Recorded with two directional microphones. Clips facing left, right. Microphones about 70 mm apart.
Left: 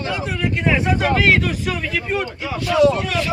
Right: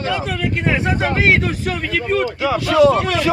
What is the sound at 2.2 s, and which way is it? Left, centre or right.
Speech, right.